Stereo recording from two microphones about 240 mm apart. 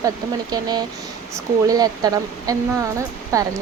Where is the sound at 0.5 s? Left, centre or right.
Centre.